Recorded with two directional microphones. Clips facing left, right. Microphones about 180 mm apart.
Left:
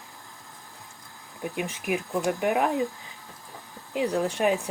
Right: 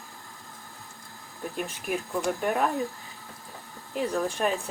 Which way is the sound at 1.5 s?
15° left (ahead or behind).